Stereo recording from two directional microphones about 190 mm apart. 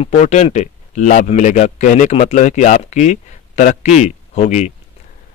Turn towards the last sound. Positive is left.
turn(degrees=35)  # may be behind; listen again after turning